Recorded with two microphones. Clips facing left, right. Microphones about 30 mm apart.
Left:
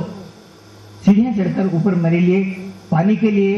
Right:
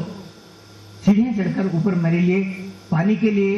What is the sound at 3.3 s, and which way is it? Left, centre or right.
Speech, left.